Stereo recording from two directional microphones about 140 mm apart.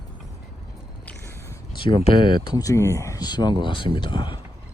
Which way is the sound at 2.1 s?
35° left (ahead or behind).